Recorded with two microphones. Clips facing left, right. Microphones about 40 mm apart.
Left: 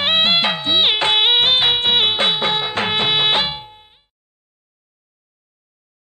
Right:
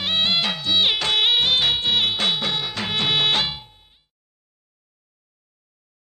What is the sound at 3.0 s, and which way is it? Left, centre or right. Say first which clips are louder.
Music: left 1 dB; left.